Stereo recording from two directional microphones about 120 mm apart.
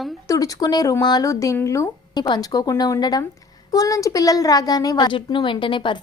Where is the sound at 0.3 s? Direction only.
30° left (ahead or behind).